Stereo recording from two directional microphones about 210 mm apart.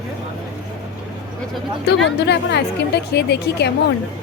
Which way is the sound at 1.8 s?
55° left (ahead or behind).